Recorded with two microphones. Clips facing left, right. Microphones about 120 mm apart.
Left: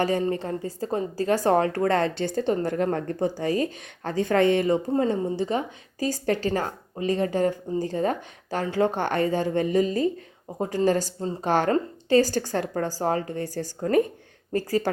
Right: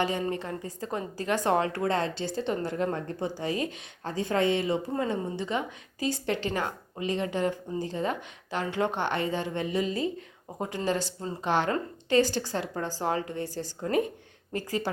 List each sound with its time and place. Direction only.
0.0 s a woman's voice: 40° left (ahead or behind)
4.0 s speech: 55° left (ahead or behind)
4.9 s a woman's voice: 35° left (ahead or behind)
13.0 s a woman's voice: 40° left (ahead or behind)